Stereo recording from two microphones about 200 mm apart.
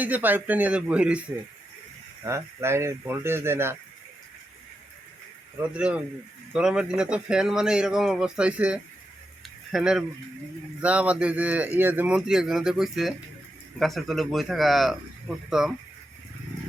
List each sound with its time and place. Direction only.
0.0 s speech: 10° right (ahead or behind)
2.2 s speech: 15° right (ahead or behind)
5.7 s speech: 5° right (ahead or behind)